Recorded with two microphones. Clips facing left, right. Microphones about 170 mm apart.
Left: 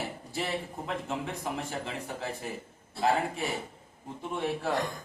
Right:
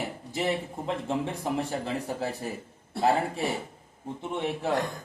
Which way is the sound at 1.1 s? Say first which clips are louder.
Right 7 dB; 30° right (ahead or behind).